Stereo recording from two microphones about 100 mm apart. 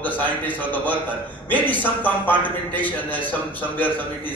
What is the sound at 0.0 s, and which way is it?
A man's voice, 15° left (ahead or behind).